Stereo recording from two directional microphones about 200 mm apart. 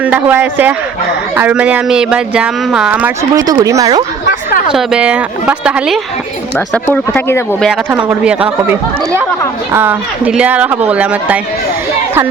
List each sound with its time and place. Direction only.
0.0 s speech: 10° right (ahead or behind)
3.4 s speech: 20° right (ahead or behind)
4.7 s speech: 5° right (ahead or behind)
6.8 s speech: 10° left (ahead or behind)
7.7 s speech: 5° right (ahead or behind)